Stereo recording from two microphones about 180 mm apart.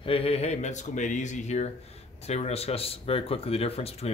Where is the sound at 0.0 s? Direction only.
30° left (ahead or behind).